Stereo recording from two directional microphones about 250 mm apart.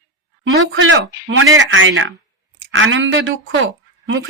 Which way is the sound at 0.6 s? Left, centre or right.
Right.